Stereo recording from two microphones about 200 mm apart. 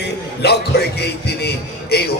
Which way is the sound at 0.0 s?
55° left (ahead or behind).